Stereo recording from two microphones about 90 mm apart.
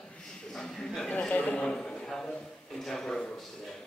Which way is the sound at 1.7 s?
5° left (ahead or behind).